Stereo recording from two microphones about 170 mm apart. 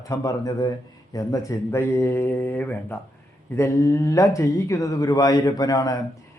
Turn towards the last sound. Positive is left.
turn(degrees=20)  # may be behind; listen again after turning